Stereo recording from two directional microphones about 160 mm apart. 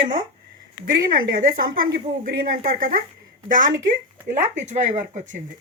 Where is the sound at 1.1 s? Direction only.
60° right (ahead or behind).